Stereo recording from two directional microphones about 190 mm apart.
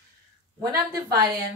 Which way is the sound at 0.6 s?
20° right (ahead or behind).